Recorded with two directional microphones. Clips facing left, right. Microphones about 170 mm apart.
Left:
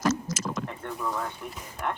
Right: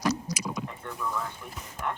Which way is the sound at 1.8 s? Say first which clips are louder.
Left 2 dB; 65° left (ahead or behind).